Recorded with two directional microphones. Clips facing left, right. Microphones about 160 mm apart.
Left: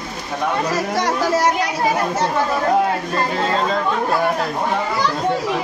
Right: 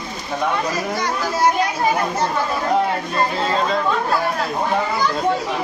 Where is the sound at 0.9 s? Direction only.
80° left.